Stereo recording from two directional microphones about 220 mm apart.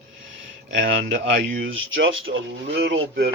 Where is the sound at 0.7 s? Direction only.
60° right (ahead or behind).